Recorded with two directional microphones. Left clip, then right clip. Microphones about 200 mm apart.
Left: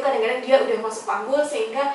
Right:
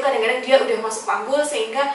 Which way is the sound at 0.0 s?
10° left (ahead or behind).